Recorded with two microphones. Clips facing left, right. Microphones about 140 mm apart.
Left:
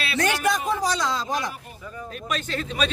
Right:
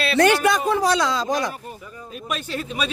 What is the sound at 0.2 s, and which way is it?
A man's voice, 70° right (ahead or behind).